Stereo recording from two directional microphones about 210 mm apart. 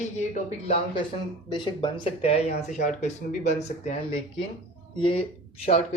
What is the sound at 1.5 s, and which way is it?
Speech, 20° left (ahead or behind).